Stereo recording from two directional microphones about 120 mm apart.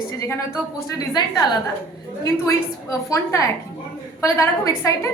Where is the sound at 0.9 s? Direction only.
35° left (ahead or behind).